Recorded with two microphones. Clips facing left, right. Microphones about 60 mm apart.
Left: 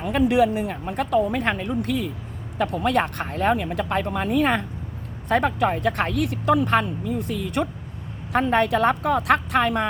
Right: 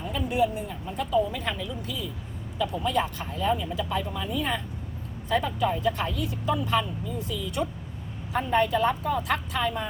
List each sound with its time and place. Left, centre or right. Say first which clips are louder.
0.0 s speech: left 7 dB; left